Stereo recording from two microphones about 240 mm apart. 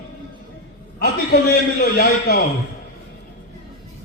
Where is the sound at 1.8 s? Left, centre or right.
Left.